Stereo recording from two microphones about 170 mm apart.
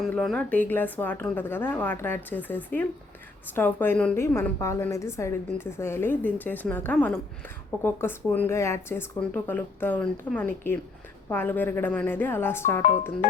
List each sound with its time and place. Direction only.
0.0 s a woman's voice: 5° left (ahead or behind)
12.8 s speech: 45° left (ahead or behind)